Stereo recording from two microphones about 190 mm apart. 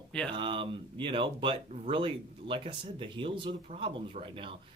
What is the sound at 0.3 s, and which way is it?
Speech, 25° right (ahead or behind).